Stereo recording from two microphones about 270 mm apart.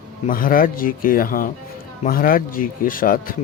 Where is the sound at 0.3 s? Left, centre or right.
Left.